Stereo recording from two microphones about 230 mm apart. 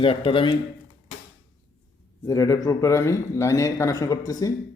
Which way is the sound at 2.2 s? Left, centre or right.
Centre.